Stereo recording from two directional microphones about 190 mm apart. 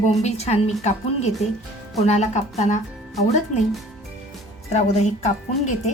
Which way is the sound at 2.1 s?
35° left (ahead or behind).